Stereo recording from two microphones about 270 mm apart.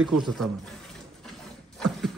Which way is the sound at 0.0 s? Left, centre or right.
Centre.